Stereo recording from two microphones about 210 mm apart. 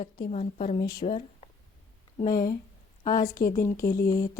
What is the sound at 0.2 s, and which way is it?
Speech, 30° left (ahead or behind).